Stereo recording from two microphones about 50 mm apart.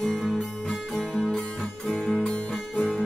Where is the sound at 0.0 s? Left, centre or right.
Centre.